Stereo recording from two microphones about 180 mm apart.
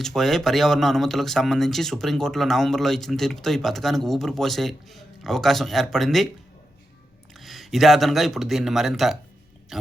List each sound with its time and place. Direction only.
0.0 s speech: centre (ahead or behind)
7.3 s speech: centre (ahead or behind)